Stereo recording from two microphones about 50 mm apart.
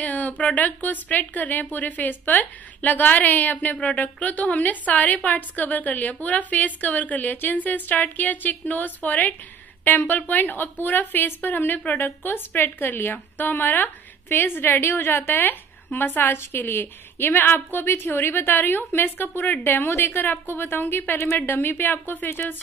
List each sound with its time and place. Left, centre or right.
0.0 s a sound: left
0.6 s a woman's voice: left
12.0 s a woman's voice: left
14.3 s a woman's voice: left